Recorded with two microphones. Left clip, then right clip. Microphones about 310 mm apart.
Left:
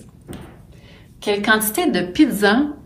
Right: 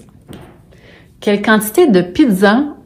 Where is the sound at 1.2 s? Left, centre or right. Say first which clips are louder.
Right 4 dB; right.